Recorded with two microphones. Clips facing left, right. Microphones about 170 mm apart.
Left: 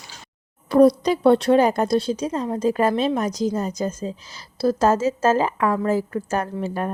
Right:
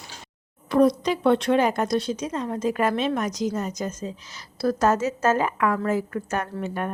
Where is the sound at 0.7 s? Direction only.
35° left (ahead or behind).